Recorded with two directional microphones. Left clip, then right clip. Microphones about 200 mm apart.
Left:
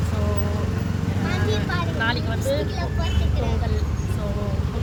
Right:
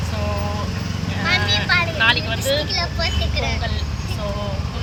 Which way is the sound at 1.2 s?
15° left (ahead or behind).